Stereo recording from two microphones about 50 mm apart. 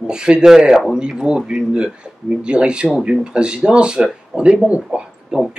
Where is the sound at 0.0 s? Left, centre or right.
Centre.